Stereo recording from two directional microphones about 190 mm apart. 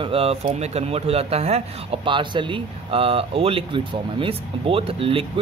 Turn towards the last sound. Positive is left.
turn(degrees=-30)  # may be behind; listen again after turning